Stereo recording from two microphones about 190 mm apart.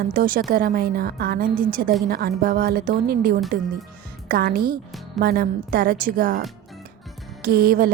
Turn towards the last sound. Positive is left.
turn(degrees=-50)  # may be behind; listen again after turning